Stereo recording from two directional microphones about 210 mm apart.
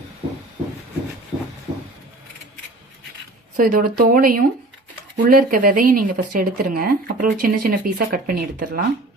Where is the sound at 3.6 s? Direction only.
40° right (ahead or behind).